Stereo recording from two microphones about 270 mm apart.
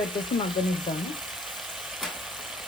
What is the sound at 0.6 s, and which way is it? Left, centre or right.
Frying, centre.